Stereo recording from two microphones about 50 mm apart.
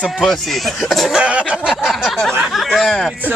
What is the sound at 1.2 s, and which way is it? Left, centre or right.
Speech, right.